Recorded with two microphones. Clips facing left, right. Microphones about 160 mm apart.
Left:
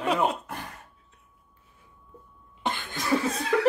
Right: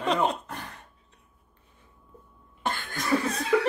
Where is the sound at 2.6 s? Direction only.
20° left (ahead or behind).